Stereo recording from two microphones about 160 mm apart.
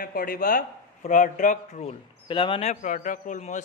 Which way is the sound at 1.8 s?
35° left (ahead or behind).